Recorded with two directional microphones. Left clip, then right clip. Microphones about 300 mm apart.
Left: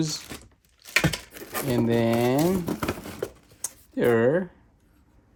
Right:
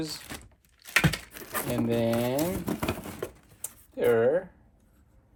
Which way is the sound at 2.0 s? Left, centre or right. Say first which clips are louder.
Left 4 dB; left.